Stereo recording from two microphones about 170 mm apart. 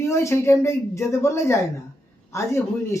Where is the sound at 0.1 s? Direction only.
15° left (ahead or behind).